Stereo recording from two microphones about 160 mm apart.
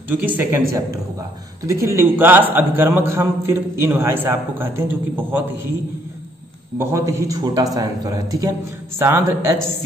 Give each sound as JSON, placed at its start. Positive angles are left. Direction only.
{"t": 0.1, "sound": "a man's voice", "side_deg": -10}
{"t": 6.8, "sound": "a man's voice", "side_deg": -20}